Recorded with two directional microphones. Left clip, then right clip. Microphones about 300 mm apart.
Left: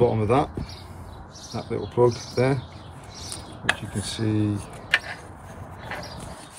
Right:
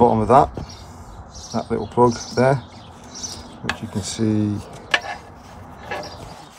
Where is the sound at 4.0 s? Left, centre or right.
Right.